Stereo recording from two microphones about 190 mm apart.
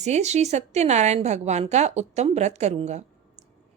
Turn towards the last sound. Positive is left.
turn(degrees=-35)  # may be behind; listen again after turning